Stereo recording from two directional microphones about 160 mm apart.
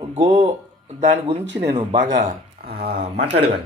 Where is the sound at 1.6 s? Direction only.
45° right (ahead or behind).